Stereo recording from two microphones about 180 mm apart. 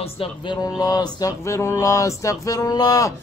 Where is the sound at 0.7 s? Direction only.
20° left (ahead or behind).